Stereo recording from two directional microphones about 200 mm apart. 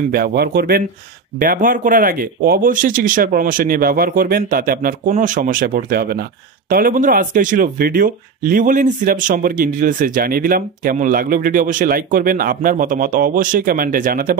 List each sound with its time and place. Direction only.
0.1 s speech: 50° right (ahead or behind)